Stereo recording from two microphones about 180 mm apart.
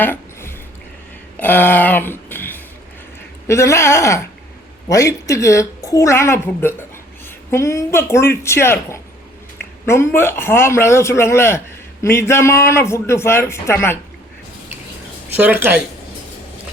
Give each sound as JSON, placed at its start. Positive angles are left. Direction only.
{"t": 0.0, "sound": "a sound", "side_deg": 10}
{"t": 3.4, "sound": "a woman's voice", "side_deg": 15}
{"t": 15.4, "sound": "speech", "side_deg": -10}